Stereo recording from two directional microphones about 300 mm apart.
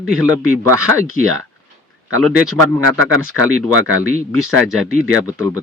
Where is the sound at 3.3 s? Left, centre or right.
Right.